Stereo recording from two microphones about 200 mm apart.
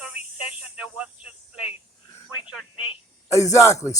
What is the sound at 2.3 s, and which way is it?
Telephone, 5° right (ahead or behind).